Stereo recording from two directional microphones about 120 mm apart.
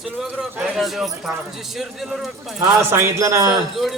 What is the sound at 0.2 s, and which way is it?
A man's voice, centre (ahead or behind).